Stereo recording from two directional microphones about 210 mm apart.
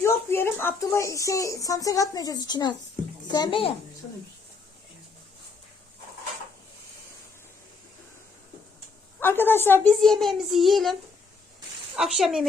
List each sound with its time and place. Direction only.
0.0 s a child's voice: 10° left (ahead or behind)
9.2 s a child's voice: 10° left (ahead or behind)
11.9 s a child's voice: centre (ahead or behind)